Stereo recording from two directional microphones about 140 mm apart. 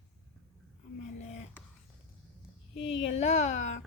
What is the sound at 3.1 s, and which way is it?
Speech, 50° left (ahead or behind).